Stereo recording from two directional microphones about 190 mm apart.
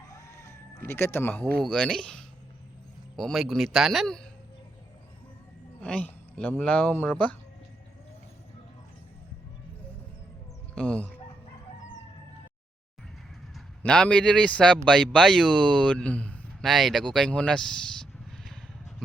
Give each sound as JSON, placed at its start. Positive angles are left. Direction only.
{"t": 0.1, "sound": "chicken", "side_deg": 15}
{"t": 0.9, "sound": "a man's voice", "side_deg": 10}
{"t": 5.8, "sound": "speech", "side_deg": 5}
{"t": 10.8, "sound": "speech", "side_deg": 5}
{"t": 13.8, "sound": "a man's voice", "side_deg": 5}